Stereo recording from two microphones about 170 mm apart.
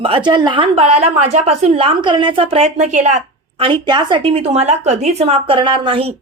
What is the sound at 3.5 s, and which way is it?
A woman's voice, 30° right (ahead or behind).